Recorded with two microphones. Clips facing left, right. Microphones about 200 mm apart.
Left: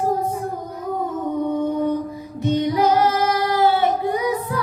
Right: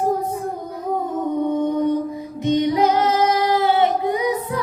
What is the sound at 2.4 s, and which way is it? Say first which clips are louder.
Child singing: right 1 dB; 20° right (ahead or behind).